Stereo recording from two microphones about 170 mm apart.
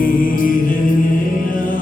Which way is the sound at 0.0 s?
55° left (ahead or behind).